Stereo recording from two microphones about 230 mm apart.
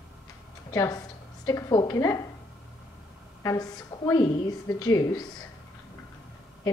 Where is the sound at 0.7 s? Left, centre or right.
Centre.